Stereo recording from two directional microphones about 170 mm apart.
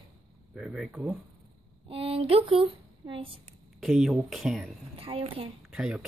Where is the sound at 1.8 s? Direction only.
35° right (ahead or behind).